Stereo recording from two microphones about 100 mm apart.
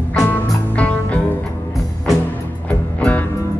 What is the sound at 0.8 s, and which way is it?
Music, 15° left (ahead or behind).